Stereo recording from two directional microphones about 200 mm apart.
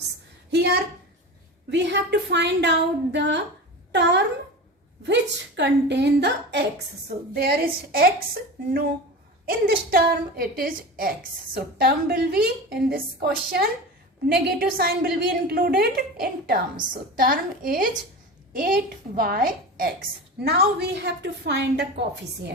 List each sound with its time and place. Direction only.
0.5 s a woman's voice: 55° right (ahead or behind)
5.0 s a woman's voice: 60° right (ahead or behind)
19.1 s a woman's voice: 45° right (ahead or behind)